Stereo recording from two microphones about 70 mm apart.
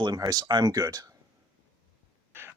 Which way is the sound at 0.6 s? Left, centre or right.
Right.